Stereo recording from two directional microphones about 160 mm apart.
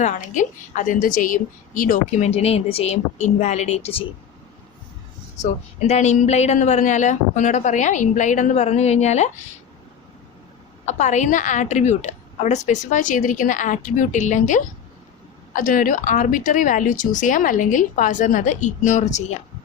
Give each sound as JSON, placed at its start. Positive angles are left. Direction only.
{"t": 0.0, "sound": "a woman's voice", "side_deg": 50}
{"t": 5.9, "sound": "a woman's voice", "side_deg": 45}
{"t": 10.8, "sound": "a woman's voice", "side_deg": 50}